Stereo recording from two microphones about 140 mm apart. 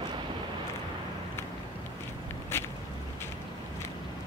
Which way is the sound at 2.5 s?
15° left (ahead or behind).